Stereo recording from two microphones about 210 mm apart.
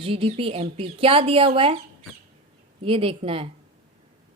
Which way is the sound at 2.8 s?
25° right (ahead or behind).